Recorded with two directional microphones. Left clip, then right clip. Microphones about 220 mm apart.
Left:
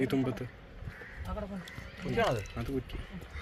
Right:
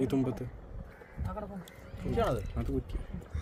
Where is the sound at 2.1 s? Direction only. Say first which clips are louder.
Left 1 dB; 15° right (ahead or behind).